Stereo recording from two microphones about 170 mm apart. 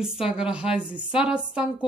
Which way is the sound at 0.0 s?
5° right (ahead or behind).